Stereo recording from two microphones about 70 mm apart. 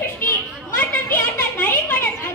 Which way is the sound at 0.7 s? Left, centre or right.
Left.